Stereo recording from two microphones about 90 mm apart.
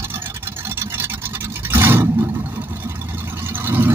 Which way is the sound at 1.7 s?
25° right (ahead or behind).